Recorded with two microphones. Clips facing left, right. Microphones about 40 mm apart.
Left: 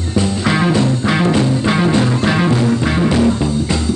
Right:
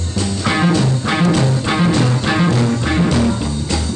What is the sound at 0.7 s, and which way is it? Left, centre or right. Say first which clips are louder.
Music: left 2 dB; centre.